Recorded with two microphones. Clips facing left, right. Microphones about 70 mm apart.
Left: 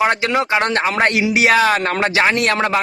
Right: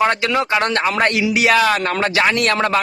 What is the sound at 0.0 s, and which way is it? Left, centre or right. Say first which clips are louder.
Speech: even; left.